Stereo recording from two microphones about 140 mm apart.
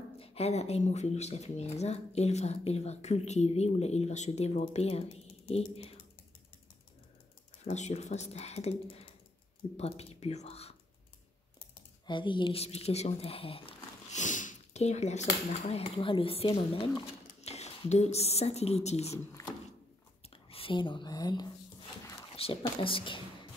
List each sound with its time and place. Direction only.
0.2 s speech: 45° left (ahead or behind)
7.6 s speech: 55° left (ahead or behind)
12.1 s speech: 35° left (ahead or behind)
12.6 s speech: 50° left (ahead or behind)
14.1 s speech: 65° left (ahead or behind)
19.4 s a sound: 25° left (ahead or behind)
20.4 s speech: 40° left (ahead or behind)
22.3 s speech: 40° left (ahead or behind)